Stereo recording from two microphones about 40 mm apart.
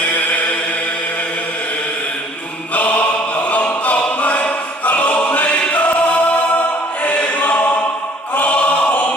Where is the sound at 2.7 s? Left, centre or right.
Left.